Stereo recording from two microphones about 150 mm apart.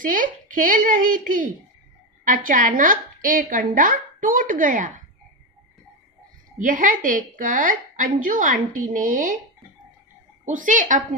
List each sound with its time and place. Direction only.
0.0 s a woman's voice: 65° right (ahead or behind)
6.6 s a woman's voice: 60° right (ahead or behind)
10.4 s a woman's voice: 60° right (ahead or behind)